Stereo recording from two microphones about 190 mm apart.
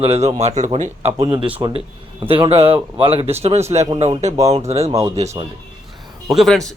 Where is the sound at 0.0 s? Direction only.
30° right (ahead or behind).